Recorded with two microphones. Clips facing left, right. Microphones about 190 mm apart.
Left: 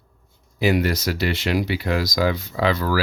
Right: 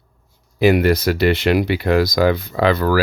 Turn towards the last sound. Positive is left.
turn(degrees=-55)  # may be behind; listen again after turning